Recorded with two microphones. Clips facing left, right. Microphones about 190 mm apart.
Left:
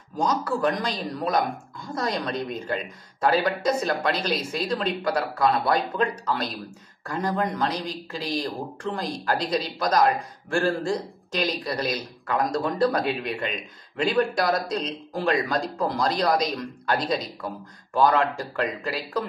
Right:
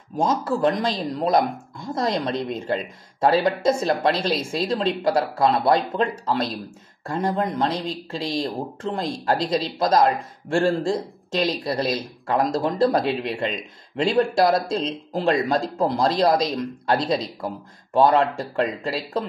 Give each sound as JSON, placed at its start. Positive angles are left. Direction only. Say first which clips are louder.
{"t": 0.1, "sound": "speech", "louder": "right 3 dB", "side_deg": -25}